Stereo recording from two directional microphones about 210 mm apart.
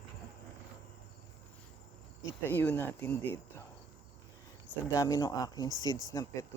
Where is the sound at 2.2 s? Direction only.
10° left (ahead or behind).